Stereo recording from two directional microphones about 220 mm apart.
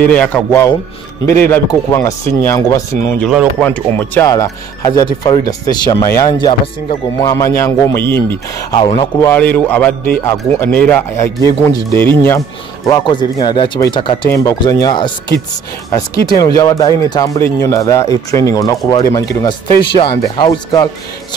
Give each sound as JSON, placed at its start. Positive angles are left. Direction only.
{"t": 0.0, "sound": "speech", "side_deg": 5}
{"t": 3.3, "sound": "speech", "side_deg": 0}
{"t": 8.7, "sound": "speech", "side_deg": 20}
{"t": 9.3, "sound": "speech", "side_deg": 10}